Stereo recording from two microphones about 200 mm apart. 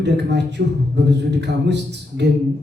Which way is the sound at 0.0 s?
60° right (ahead or behind).